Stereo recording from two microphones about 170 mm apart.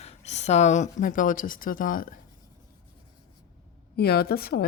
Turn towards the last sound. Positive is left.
turn(degrees=65)  # may be behind; listen again after turning